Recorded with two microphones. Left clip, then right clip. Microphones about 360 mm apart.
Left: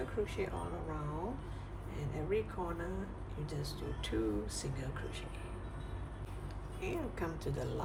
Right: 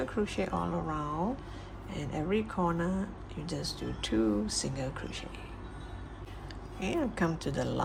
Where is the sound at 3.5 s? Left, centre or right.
Centre.